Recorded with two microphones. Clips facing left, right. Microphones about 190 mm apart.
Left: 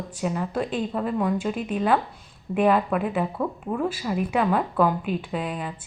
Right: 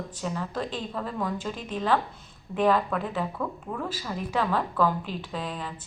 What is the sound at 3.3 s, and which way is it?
Speech, 25° left (ahead or behind).